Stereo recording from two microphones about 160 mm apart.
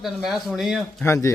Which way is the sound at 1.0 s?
20° left (ahead or behind).